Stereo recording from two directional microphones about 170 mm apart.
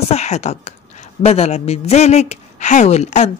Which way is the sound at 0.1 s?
40° left (ahead or behind).